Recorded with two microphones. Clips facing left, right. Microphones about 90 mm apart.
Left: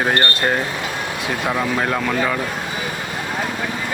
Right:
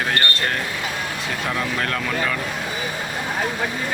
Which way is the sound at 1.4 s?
15° left (ahead or behind).